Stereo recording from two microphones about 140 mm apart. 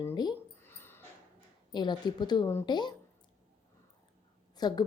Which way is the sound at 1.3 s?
30° left (ahead or behind).